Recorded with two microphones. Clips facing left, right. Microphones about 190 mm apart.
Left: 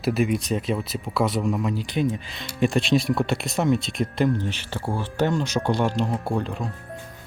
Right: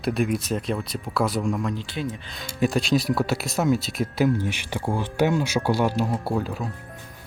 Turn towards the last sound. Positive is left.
turn(degrees=-5)  # may be behind; listen again after turning